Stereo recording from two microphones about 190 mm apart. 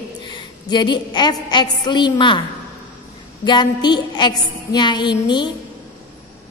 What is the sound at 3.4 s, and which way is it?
A woman's voice, 25° left (ahead or behind).